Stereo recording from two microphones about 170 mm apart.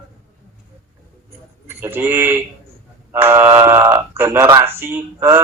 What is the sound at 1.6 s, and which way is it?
A man's voice, 15° right (ahead or behind).